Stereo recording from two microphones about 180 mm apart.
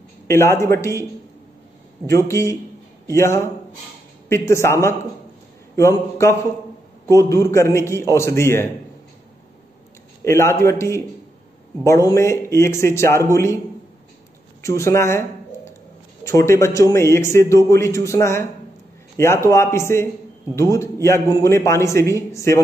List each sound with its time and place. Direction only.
0.3 s a man's voice: 15° left (ahead or behind)
2.1 s a man's voice: 15° left (ahead or behind)
10.2 s a man's voice: 15° left (ahead or behind)
14.6 s a man's voice: 15° left (ahead or behind)